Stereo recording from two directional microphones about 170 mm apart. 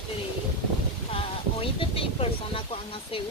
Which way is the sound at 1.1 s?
30° left (ahead or behind).